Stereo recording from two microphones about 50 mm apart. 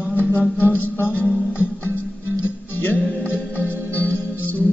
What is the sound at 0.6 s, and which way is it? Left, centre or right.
Music, left.